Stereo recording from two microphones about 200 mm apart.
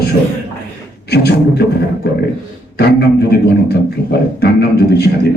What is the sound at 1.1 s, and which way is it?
Speech, 55° left (ahead or behind).